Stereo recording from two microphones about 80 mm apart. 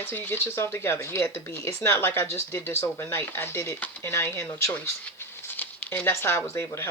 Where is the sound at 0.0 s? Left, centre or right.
Left.